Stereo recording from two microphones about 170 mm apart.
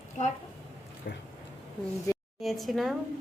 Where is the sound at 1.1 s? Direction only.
70° left (ahead or behind).